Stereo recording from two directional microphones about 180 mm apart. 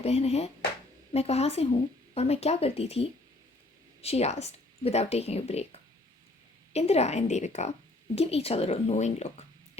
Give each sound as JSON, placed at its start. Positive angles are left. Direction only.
{"t": 0.0, "sound": "a woman's voice", "side_deg": 35}